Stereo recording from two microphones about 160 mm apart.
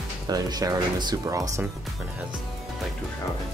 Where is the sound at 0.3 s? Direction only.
25° right (ahead or behind).